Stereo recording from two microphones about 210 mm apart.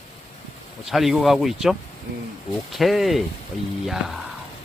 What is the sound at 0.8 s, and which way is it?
Speech, centre (ahead or behind).